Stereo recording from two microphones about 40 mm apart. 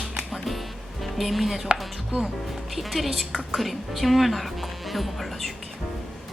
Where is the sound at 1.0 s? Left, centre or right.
Centre.